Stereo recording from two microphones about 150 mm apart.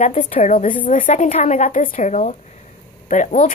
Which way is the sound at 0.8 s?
60° left (ahead or behind).